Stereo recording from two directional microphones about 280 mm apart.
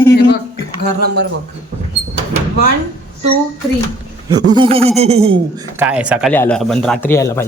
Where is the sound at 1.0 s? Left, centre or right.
Right.